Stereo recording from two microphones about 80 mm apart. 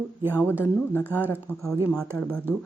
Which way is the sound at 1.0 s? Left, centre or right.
Right.